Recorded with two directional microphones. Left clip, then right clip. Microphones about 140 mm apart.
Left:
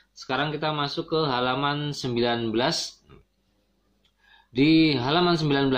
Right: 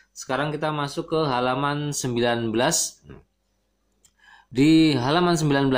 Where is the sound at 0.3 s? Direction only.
30° right (ahead or behind).